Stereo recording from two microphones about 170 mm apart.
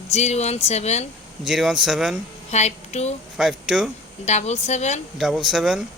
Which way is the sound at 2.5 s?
40° left (ahead or behind).